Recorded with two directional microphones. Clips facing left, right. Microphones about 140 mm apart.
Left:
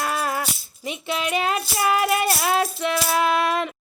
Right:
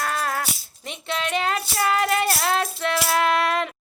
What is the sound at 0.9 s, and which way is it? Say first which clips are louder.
Child singing: left 2 dB; 10° left (ahead or behind).